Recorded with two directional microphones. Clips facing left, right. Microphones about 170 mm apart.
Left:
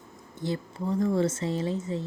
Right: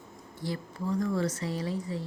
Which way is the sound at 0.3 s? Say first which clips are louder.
Left 4 dB; 25° left (ahead or behind).